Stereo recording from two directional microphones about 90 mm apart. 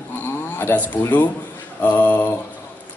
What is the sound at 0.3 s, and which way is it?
A man's voice, 25° left (ahead or behind).